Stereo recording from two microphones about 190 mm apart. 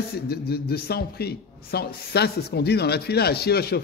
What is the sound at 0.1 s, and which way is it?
A man's voice, 55° left (ahead or behind).